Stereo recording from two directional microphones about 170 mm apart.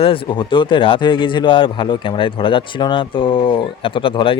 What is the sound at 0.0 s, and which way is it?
Speech, 30° left (ahead or behind).